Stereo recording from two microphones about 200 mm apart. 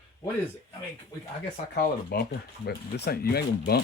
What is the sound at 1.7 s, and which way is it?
Speech, 50° left (ahead or behind).